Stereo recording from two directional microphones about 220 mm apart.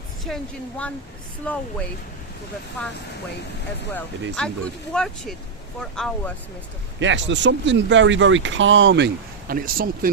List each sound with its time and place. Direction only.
0.3 s a woman's voice: 5° left (ahead or behind)
3.9 s a woman's voice: 5° left (ahead or behind)
7.0 s speech: 55° right (ahead or behind)
9.5 s speech: 40° right (ahead or behind)